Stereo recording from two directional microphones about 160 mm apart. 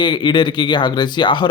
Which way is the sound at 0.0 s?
30° left (ahead or behind).